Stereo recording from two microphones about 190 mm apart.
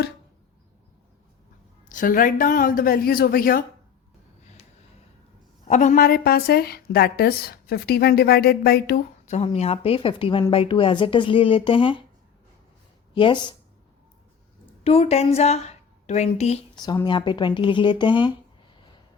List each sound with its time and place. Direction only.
1.9 s a woman's voice: 45° left (ahead or behind)
5.6 s a woman's voice: 40° left (ahead or behind); by 9.0 s 55° left (ahead or behind)
9.2 s speech: 35° left (ahead or behind)
13.1 s speech: 25° left (ahead or behind)
14.8 s a woman's voice: 35° left (ahead or behind)
16.8 s speech: 20° left (ahead or behind)